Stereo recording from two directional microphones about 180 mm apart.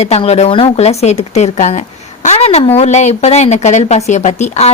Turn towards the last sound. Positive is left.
turn(degrees=40)  # may be behind; listen again after turning